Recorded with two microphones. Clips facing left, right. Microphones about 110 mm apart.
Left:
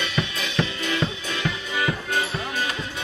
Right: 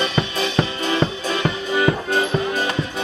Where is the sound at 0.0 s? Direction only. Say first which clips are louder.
Right 6 dB; 35° right (ahead or behind).